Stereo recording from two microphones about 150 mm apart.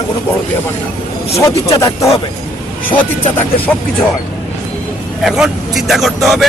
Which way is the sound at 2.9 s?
10° left (ahead or behind).